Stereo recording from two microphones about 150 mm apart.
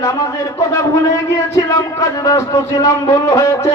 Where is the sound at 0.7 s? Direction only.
20° left (ahead or behind).